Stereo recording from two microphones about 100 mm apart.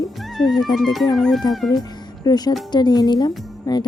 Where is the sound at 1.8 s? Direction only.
45° left (ahead or behind).